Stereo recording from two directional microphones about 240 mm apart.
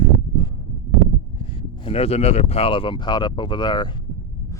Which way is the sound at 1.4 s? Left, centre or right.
Left.